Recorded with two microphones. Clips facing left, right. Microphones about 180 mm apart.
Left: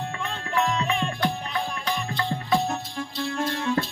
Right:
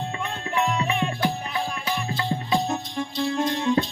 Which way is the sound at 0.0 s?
20° right (ahead or behind).